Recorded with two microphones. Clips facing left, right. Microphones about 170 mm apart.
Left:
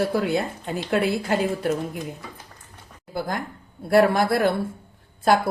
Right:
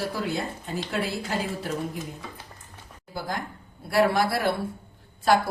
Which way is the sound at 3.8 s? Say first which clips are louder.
Left 4 dB; 50° left (ahead or behind).